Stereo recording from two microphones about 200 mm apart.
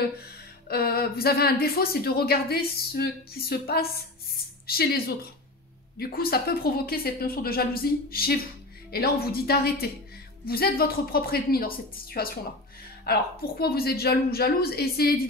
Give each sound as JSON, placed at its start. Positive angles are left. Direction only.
{"t": 0.7, "sound": "speech", "side_deg": 50}